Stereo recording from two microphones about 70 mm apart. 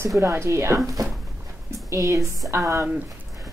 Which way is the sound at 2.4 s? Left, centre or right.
Right.